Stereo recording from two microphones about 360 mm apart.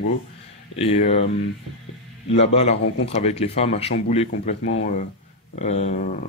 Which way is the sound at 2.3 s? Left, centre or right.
Centre.